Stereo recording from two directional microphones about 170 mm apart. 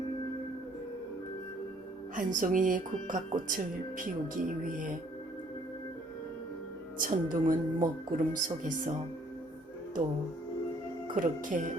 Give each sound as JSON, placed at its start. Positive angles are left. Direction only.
{"t": 2.1, "sound": "speech", "side_deg": -50}
{"t": 7.0, "sound": "speech", "side_deg": -55}
{"t": 11.1, "sound": "speech", "side_deg": -50}